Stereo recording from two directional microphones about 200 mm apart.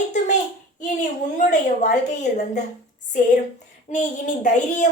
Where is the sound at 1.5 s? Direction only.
40° left (ahead or behind).